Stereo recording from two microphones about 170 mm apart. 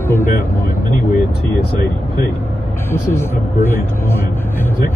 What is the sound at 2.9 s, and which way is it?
Speech, 15° left (ahead or behind).